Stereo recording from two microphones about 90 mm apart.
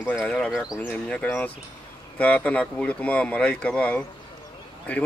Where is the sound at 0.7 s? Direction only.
15° left (ahead or behind).